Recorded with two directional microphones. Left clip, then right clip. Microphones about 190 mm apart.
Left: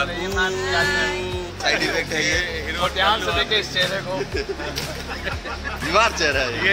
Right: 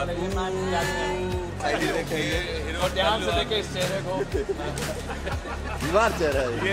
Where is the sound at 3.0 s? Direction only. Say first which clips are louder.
Left 4 dB; 15° left (ahead or behind).